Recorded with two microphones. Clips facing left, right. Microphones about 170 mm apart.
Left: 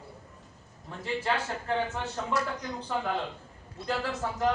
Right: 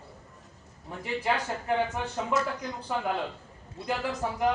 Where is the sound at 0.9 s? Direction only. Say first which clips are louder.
Right 2 dB; 15° right (ahead or behind).